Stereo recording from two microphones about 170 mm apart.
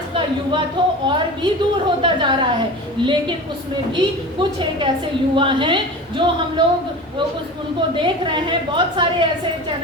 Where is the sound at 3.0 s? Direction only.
30° right (ahead or behind).